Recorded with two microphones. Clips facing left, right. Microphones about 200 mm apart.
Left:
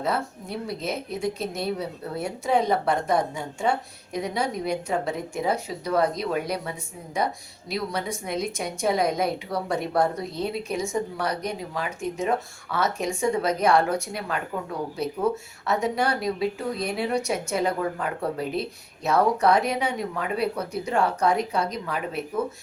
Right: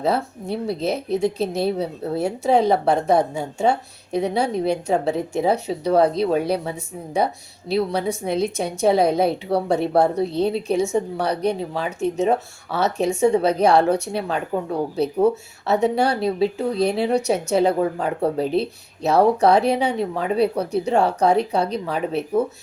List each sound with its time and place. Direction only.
0.0 s a woman's voice: 30° right (ahead or behind)